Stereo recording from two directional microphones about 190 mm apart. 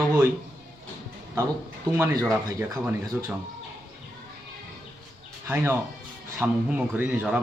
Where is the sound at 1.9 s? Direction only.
10° right (ahead or behind).